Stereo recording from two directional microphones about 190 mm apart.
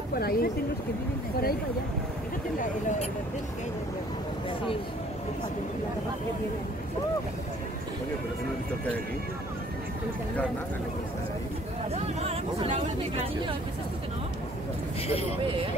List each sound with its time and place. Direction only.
0.1 s speech: 50° left (ahead or behind)
11.9 s speech: 35° right (ahead or behind)